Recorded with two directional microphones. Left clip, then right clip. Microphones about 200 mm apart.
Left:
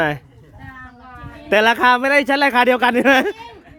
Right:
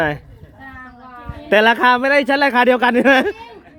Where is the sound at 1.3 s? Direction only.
5° left (ahead or behind).